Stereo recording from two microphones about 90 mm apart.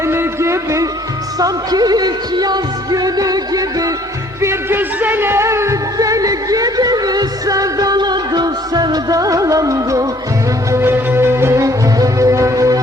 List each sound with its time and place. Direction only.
0.0 s a sound: 30° right (ahead or behind)
1.4 s music: 45° right (ahead or behind)
4.4 s music: 30° right (ahead or behind)
10.7 s music: 25° right (ahead or behind)